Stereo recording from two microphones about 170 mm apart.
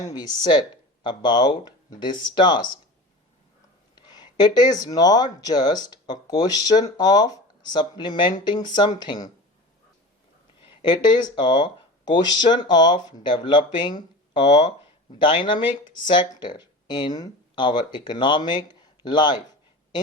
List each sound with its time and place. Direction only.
0.0 s speech: 25° left (ahead or behind)
3.9 s speech: 25° left (ahead or behind)
10.6 s speech: 25° left (ahead or behind)